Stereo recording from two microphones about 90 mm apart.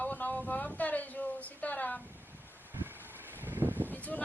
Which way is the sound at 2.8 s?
25° right (ahead or behind).